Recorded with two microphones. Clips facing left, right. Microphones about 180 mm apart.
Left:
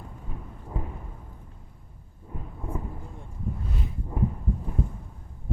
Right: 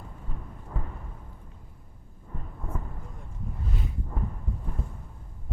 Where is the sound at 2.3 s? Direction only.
10° left (ahead or behind).